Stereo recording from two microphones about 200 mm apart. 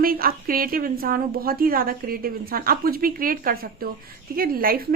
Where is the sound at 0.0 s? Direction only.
45° right (ahead or behind).